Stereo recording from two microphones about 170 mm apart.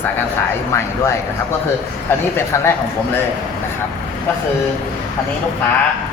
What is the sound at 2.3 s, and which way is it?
Speech, 15° left (ahead or behind).